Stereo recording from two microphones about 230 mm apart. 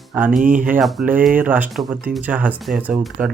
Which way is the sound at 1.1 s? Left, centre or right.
Right.